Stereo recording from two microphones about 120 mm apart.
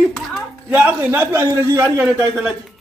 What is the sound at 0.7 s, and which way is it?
A man's voice, 15° right (ahead or behind).